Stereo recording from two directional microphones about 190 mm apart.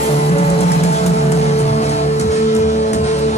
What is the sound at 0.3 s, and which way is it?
Music, 35° left (ahead or behind).